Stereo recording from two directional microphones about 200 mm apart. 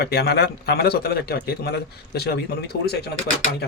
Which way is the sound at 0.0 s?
55° left (ahead or behind).